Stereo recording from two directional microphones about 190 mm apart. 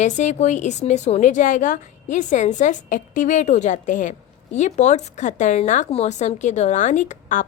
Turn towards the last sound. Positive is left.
turn(degrees=40)  # may be behind; listen again after turning